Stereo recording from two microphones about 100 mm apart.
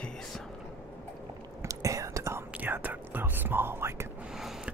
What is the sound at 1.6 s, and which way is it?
Whispering, 35° right (ahead or behind).